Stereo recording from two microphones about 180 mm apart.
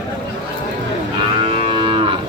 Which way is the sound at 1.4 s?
30° right (ahead or behind).